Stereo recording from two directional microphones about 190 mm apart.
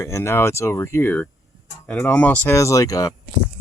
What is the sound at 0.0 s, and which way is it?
Speech, 15° left (ahead or behind).